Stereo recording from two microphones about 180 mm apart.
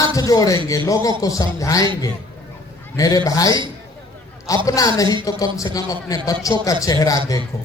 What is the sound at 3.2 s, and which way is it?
A man's voice, 20° left (ahead or behind).